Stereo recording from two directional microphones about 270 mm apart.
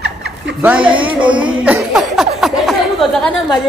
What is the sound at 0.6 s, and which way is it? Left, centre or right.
Speech, centre.